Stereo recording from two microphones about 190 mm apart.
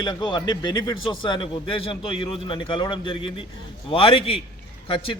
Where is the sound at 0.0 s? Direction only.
25° left (ahead or behind).